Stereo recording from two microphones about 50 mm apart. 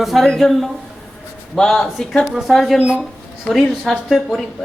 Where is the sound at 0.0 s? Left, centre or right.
Centre.